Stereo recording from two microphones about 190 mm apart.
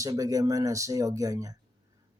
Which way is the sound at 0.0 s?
15° right (ahead or behind).